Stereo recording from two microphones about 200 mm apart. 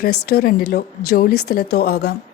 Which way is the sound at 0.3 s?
50° left (ahead or behind).